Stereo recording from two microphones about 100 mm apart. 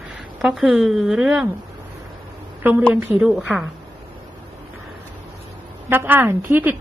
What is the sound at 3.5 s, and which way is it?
Speech, 5° right (ahead or behind).